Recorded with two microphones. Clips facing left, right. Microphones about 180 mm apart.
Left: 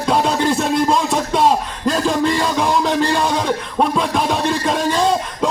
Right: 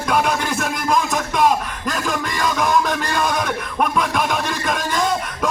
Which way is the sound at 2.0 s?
20° left (ahead or behind).